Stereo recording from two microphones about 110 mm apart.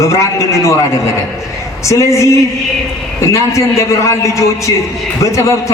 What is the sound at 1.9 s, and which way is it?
A man's voice, 25° left (ahead or behind).